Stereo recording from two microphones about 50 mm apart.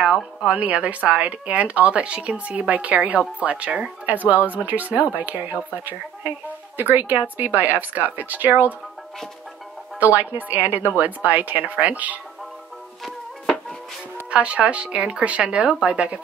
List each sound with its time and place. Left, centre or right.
0.5 s a woman's voice: right
9.9 s a woman's voice: right
13.0 s music: centre
14.3 s speech: right